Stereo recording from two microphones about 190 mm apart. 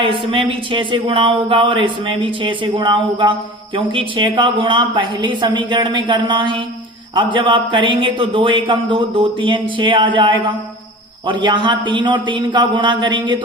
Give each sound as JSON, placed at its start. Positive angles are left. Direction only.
{"t": 0.0, "sound": "a man's voice", "side_deg": -25}